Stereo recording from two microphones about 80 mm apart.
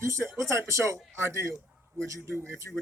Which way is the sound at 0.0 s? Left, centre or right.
Right.